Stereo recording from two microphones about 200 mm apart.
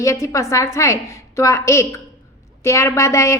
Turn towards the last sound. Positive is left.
turn(degrees=15)  # may be behind; listen again after turning